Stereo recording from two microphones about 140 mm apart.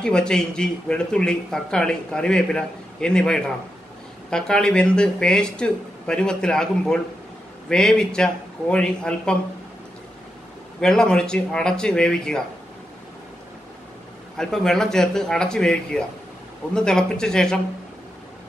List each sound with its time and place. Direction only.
0.0 s a man's voice: 5° left (ahead or behind)
10.8 s a man's voice: 5° left (ahead or behind)
14.3 s a man's voice: 5° left (ahead or behind)